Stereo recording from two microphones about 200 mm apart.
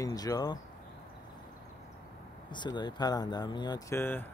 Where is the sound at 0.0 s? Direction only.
20° left (ahead or behind).